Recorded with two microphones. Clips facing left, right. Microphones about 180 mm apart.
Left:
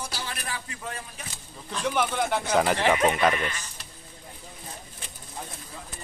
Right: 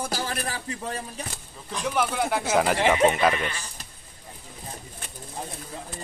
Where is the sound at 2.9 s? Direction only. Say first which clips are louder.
Right 3 dB; 25° right (ahead or behind).